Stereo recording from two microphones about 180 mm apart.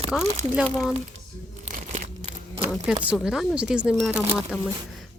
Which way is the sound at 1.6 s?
45° right (ahead or behind).